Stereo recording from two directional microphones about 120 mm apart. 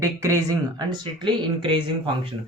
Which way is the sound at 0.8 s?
40° right (ahead or behind).